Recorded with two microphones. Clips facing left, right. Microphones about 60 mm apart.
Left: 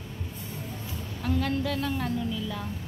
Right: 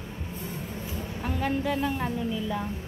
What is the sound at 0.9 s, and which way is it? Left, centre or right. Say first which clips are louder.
A woman's voice: left 3 dB; centre.